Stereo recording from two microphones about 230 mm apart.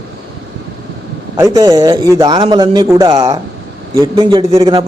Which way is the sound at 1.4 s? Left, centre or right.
Centre.